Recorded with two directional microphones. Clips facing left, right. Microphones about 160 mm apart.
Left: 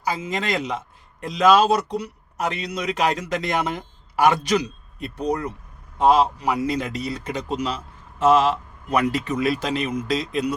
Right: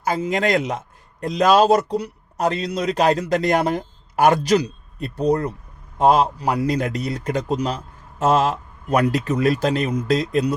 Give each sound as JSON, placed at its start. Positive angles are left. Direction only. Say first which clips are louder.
{"t": 0.0, "sound": "a man's voice", "louder": "right 5 dB", "side_deg": -50}
{"t": 6.0, "sound": "a man's voice", "louder": "right 1 dB", "side_deg": -45}